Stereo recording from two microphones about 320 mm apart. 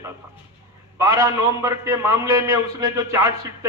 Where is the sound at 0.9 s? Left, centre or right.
Centre.